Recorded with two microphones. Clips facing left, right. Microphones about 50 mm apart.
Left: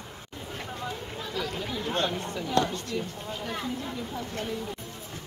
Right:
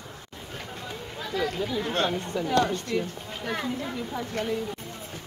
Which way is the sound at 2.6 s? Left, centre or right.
Right.